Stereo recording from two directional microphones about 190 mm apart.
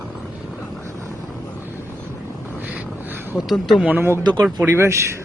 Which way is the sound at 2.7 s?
10° right (ahead or behind).